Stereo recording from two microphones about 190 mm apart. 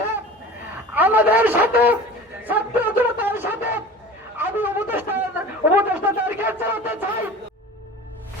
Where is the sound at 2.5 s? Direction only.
10° right (ahead or behind).